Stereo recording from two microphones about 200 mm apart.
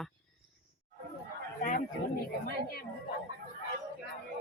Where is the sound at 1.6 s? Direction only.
40° left (ahead or behind).